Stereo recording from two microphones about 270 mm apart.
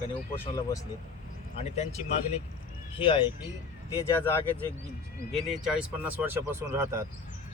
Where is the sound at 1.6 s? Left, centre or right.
Left.